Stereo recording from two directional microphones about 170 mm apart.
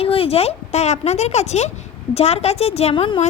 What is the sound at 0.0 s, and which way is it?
A woman's voice, 35° left (ahead or behind).